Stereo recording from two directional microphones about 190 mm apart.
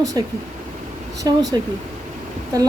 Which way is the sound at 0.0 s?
20° right (ahead or behind).